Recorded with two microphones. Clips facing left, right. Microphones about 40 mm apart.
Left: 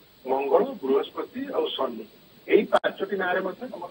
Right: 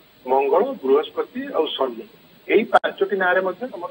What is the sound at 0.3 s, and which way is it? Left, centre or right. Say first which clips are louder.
A man's voice: right 5 dB; right.